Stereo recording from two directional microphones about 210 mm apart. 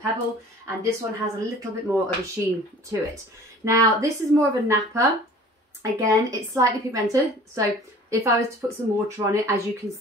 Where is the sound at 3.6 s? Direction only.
15° right (ahead or behind).